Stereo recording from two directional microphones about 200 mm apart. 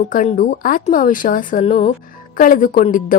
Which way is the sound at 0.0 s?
35° left (ahead or behind).